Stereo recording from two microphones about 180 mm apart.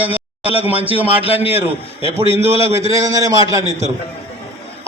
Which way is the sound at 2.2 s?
35° right (ahead or behind).